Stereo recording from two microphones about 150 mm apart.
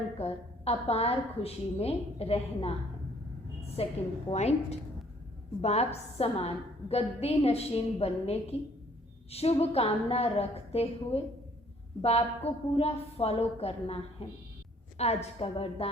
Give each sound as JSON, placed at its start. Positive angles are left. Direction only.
{"t": 0.2, "sound": "a woman's voice", "side_deg": 40}
{"t": 3.8, "sound": "a woman's voice", "side_deg": 45}